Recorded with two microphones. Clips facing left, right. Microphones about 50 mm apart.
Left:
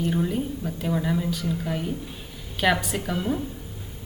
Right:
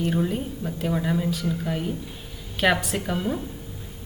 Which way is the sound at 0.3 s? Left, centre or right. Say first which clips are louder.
Left 1 dB; right.